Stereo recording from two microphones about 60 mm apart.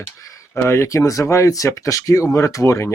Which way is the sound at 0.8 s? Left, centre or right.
Left.